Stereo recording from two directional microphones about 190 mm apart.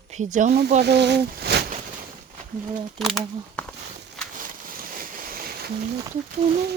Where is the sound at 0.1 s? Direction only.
40° right (ahead or behind).